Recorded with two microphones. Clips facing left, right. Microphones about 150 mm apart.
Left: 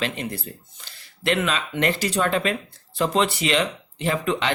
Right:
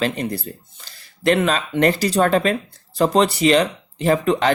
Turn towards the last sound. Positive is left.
turn(degrees=-40)  # may be behind; listen again after turning